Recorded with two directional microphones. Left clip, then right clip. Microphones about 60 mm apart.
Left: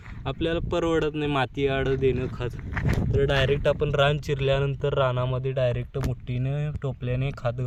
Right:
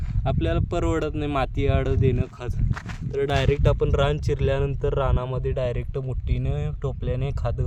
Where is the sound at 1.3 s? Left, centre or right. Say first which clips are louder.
Right 1 dB; right.